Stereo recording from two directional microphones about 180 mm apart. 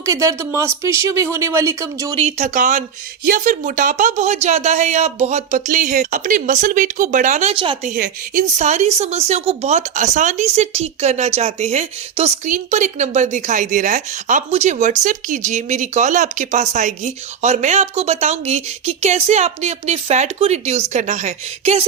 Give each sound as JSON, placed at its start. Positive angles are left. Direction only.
{"t": 0.0, "sound": "speech", "side_deg": -15}
{"t": 2.1, "sound": "speech", "side_deg": -40}
{"t": 7.5, "sound": "speech", "side_deg": -30}
{"t": 7.9, "sound": "speech", "side_deg": -45}